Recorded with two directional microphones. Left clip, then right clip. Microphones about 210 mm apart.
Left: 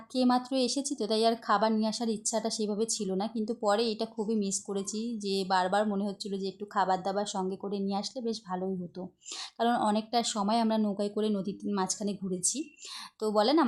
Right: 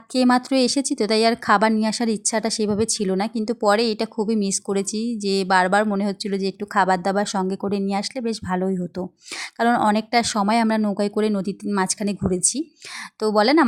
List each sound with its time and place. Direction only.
0.1 s speech: 35° right (ahead or behind)